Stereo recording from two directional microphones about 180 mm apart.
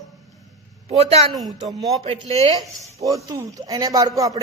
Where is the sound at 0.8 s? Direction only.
35° right (ahead or behind).